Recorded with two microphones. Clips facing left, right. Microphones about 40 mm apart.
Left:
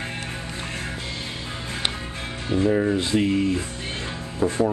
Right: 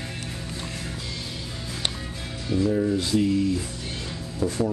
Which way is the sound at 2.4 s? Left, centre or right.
Left.